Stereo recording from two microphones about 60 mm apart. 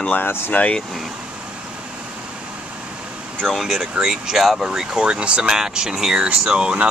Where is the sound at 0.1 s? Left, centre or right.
Left.